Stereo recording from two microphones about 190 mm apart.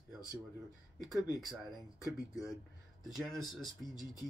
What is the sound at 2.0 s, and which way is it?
Speech, 15° left (ahead or behind).